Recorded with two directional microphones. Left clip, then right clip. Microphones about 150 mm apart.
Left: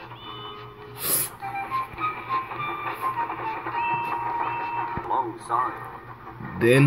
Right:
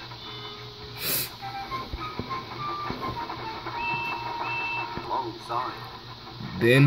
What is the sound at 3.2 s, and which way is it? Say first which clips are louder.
Printer: left 5 dB; 20° right (ahead or behind).